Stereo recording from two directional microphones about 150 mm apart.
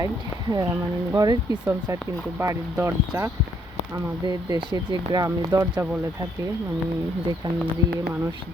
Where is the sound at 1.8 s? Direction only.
15° right (ahead or behind).